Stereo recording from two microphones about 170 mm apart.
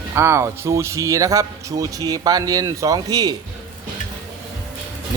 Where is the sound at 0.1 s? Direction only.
15° right (ahead or behind).